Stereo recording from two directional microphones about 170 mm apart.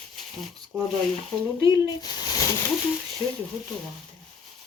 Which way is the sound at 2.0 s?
25° left (ahead or behind).